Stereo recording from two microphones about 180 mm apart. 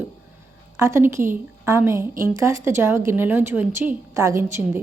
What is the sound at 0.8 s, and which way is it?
A woman's voice, 15° right (ahead or behind).